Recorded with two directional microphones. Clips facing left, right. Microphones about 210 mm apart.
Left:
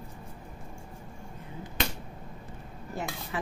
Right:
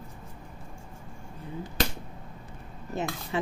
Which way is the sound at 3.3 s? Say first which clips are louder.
Right 5 dB; 25° right (ahead or behind).